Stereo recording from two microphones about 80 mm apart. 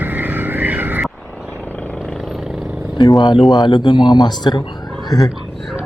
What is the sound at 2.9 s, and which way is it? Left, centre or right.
Speech, left.